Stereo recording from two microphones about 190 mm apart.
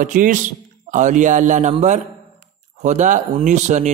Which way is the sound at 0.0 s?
45° right (ahead or behind).